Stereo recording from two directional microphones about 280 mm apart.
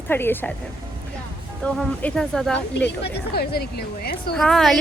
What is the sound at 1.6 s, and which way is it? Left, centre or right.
Speech, centre.